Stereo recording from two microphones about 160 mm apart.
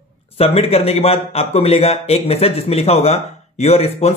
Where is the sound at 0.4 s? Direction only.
40° left (ahead or behind).